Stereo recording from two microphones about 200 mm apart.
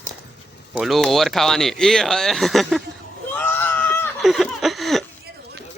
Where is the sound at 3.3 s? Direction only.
10° left (ahead or behind).